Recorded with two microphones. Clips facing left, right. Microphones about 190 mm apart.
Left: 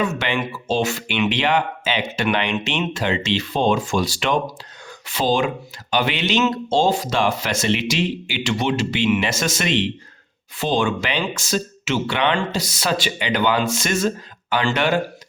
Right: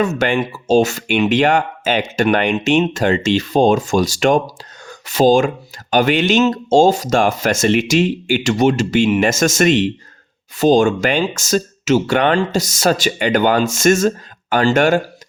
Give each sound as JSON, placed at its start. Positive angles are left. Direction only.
{"t": 0.0, "sound": "speech", "side_deg": -45}